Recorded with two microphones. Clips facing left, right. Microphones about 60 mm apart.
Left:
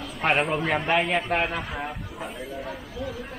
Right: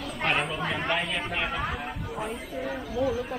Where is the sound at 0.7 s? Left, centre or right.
Left.